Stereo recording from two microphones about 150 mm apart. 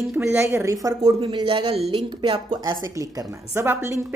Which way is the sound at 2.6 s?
20° right (ahead or behind).